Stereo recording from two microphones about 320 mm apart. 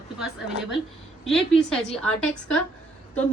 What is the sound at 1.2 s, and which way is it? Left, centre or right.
A woman's voice, centre.